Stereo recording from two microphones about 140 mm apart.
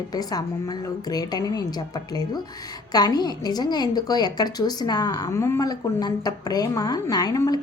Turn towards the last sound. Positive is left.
turn(degrees=25)  # may be behind; listen again after turning